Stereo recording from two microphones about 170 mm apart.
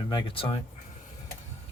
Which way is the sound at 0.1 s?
30° left (ahead or behind).